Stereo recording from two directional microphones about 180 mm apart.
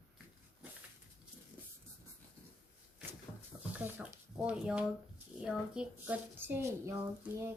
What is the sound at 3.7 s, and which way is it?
A woman's voice, 5° right (ahead or behind).